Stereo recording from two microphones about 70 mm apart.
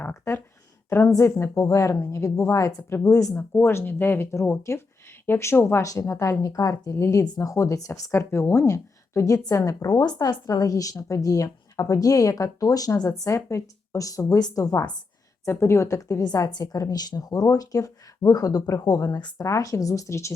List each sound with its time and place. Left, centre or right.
0.3 s a woman's voice: left
0.9 s a woman's voice: left
1.2 s a woman's voice: left
3.3 s a woman's voice: left
6.9 s a woman's voice: left
8.1 s a woman's voice: left
14.3 s a woman's voice: left
15.4 s a woman's voice: left
16.2 s a woman's voice: left